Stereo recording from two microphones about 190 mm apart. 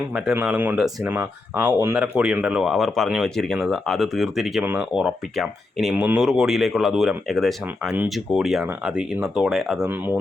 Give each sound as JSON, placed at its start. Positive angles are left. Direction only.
{"t": 0.1, "sound": "speech", "side_deg": -5}